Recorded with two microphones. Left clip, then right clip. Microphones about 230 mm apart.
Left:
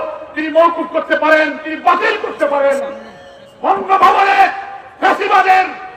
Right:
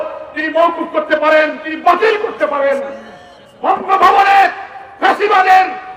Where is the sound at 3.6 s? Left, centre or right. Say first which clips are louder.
Even; right.